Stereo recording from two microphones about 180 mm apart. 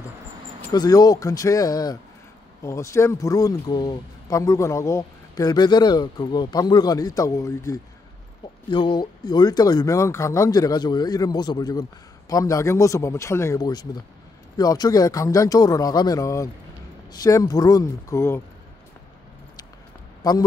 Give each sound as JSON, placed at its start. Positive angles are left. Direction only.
{"t": 0.7, "sound": "speech", "side_deg": 20}
{"t": 20.2, "sound": "speech", "side_deg": 20}